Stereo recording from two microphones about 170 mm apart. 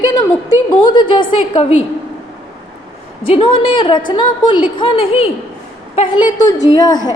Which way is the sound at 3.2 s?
35° left (ahead or behind).